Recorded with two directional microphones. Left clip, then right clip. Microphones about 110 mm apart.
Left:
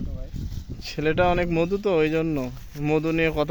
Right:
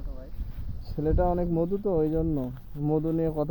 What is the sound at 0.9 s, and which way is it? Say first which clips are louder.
Speech: left 5 dB; 90° left.